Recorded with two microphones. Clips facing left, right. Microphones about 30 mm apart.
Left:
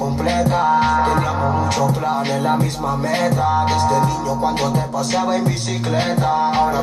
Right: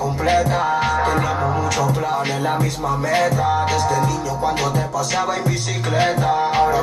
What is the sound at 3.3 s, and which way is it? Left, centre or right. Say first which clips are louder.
Music: left 1 dB; left.